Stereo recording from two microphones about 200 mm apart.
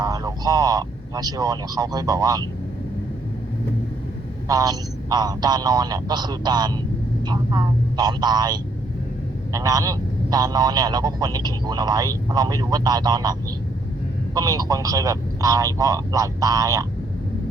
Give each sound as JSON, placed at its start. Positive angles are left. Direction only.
{"t": 0.0, "sound": "speech", "side_deg": -20}
{"t": 4.4, "sound": "speech", "side_deg": -20}
{"t": 14.3, "sound": "speech", "side_deg": -20}